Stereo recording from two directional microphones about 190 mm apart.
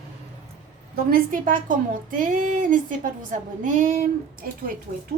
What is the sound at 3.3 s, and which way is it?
Speech, 40° right (ahead or behind).